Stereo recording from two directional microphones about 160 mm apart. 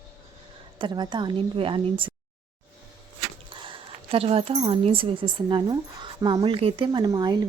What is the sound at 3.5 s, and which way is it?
Speech, 35° right (ahead or behind).